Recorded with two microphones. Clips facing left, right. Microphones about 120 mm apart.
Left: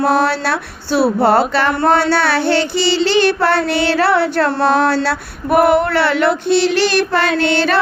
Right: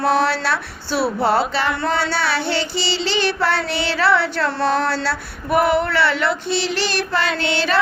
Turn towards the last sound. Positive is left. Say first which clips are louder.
# left 5 dB
turn(degrees=55)  # may be behind; listen again after turning